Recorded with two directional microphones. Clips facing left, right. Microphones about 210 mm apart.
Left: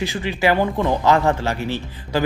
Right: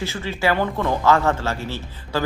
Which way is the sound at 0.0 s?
15° left (ahead or behind).